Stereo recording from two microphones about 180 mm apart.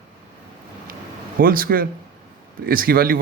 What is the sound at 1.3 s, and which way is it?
Speech, 50° right (ahead or behind).